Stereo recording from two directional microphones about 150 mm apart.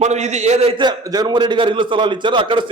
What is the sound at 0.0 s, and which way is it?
A man's voice, 50° right (ahead or behind).